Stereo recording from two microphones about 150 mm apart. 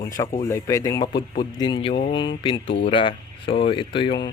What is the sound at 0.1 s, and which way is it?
A man's voice, 25° left (ahead or behind).